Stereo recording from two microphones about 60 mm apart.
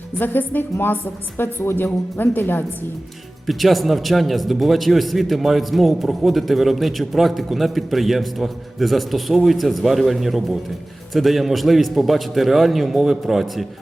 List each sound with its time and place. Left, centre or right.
0.2 s a woman's voice: left
3.4 s a man's voice: centre